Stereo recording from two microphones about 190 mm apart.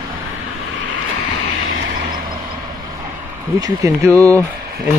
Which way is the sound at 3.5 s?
15° right (ahead or behind).